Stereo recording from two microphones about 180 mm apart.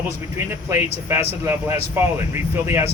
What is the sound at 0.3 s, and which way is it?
Speech, 15° right (ahead or behind).